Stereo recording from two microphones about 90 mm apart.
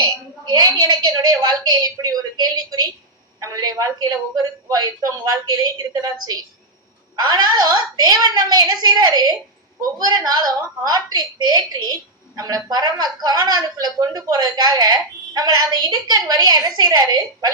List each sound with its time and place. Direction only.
0.0 s a woman's voice: 50° right (ahead or behind)